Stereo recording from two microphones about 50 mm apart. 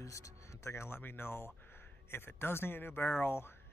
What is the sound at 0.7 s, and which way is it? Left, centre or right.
Speech, left.